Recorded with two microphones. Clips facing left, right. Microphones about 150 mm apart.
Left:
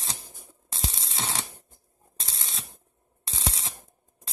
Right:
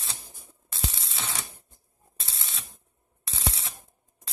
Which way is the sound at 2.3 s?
30° left (ahead or behind).